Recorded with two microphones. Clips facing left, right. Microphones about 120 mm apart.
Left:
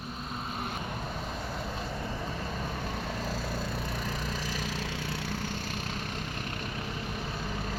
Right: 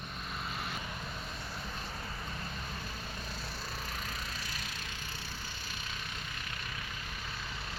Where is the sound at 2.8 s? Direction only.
80° left.